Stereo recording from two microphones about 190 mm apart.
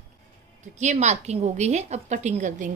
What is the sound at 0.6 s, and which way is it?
A woman's voice, 40° right (ahead or behind).